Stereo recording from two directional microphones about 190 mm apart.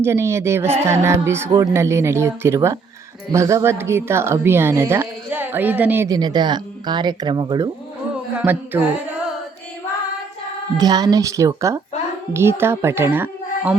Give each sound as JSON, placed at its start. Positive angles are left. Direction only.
{"t": 0.0, "sound": "a woman's voice", "side_deg": -15}
{"t": 8.1, "sound": "a sound", "side_deg": -5}
{"t": 10.8, "sound": "a woman's voice", "side_deg": -20}